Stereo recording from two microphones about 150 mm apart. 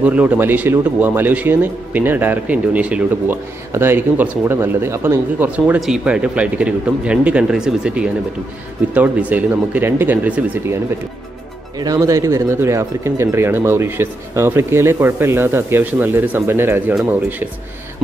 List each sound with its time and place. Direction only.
0.0 s speech: 10° right (ahead or behind)
5.8 s speech: 5° right (ahead or behind)
11.8 s speech: 20° right (ahead or behind)